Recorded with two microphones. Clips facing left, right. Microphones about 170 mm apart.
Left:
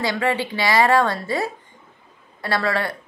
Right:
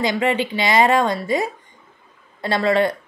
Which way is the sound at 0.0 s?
20° right (ahead or behind).